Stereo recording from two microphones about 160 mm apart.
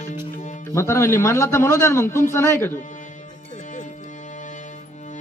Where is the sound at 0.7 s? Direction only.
15° left (ahead or behind).